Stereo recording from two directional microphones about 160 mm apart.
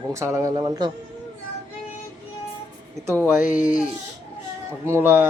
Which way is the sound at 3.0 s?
15° right (ahead or behind).